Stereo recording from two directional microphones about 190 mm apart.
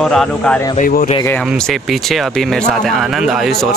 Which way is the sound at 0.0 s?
Centre (ahead or behind).